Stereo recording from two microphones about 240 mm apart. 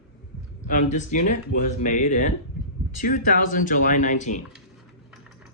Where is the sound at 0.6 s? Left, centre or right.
Left.